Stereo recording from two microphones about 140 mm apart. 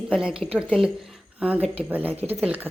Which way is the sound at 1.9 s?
10° right (ahead or behind).